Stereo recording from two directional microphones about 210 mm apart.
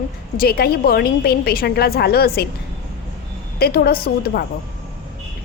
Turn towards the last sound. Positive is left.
turn(degrees=45)  # may be behind; listen again after turning